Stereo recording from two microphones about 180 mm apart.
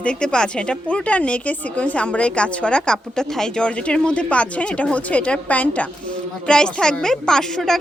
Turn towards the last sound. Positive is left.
turn(degrees=0)  # may be behind; listen again after turning